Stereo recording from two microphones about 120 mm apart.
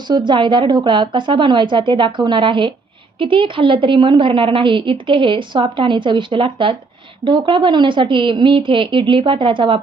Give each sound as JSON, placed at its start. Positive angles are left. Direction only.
{"t": 0.1, "sound": "a woman's voice", "side_deg": -40}